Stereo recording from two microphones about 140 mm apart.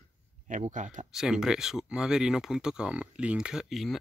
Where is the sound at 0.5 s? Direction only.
65° right (ahead or behind).